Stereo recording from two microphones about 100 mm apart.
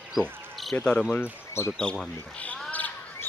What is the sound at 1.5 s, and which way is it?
Speech, 25° left (ahead or behind).